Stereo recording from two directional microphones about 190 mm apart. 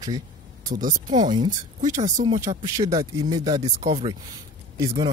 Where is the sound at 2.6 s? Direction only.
20° right (ahead or behind).